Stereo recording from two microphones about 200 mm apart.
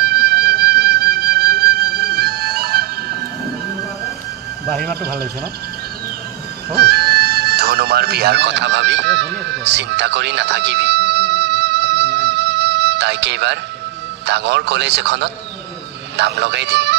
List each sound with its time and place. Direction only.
0.0 s music: 50° right (ahead or behind)
4.6 s speech: centre (ahead or behind)
5.0 s speech: 55° right (ahead or behind)
6.7 s music: 50° right (ahead or behind)
14.2 s a man's voice: 60° right (ahead or behind)